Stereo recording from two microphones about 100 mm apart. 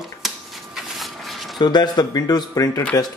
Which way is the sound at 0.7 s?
Centre (ahead or behind).